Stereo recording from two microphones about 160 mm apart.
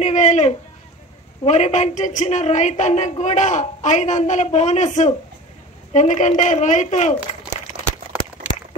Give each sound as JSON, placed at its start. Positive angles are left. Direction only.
{"t": 0.0, "sound": "a woman's voice", "side_deg": 45}